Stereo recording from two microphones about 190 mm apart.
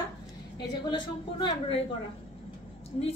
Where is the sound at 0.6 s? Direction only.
25° left (ahead or behind).